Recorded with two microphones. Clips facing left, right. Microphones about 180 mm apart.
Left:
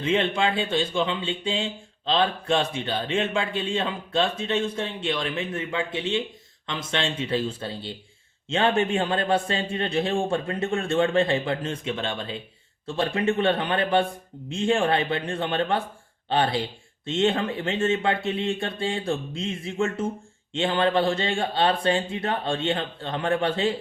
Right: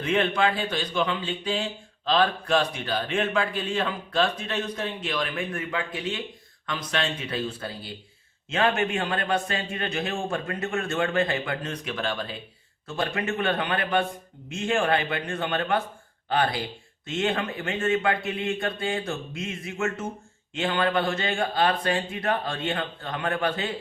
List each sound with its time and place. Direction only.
0.0 s speech: 25° left (ahead or behind)